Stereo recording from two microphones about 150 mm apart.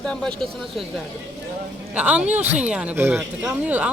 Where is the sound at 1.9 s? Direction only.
10° right (ahead or behind).